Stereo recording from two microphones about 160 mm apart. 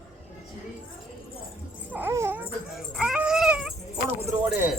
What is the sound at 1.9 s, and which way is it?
Dog, 10° right (ahead or behind).